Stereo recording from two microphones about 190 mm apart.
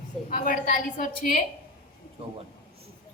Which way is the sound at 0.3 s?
45° left (ahead or behind).